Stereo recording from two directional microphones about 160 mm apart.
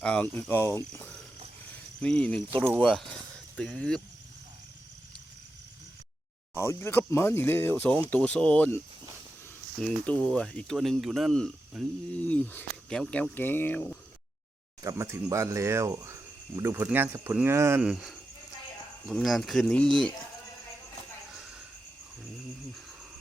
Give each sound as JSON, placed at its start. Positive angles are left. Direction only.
{"t": 0.0, "sound": "speech", "side_deg": 10}
{"t": 0.9, "sound": "cricket", "side_deg": 10}
{"t": 2.0, "sound": "speech", "side_deg": 5}
{"t": 6.6, "sound": "speech", "side_deg": 15}
{"t": 9.8, "sound": "speech", "side_deg": 10}
{"t": 14.8, "sound": "speech", "side_deg": -20}
{"t": 19.0, "sound": "speech", "side_deg": 0}